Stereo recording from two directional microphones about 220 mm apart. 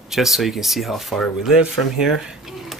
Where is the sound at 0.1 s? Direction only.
Centre (ahead or behind).